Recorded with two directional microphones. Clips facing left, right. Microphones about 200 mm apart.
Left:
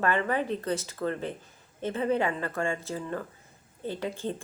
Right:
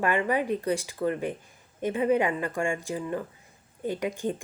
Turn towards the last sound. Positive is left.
turn(degrees=-15)  # may be behind; listen again after turning